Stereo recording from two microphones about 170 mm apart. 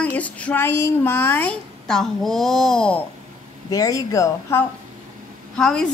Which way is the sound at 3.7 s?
20° left (ahead or behind).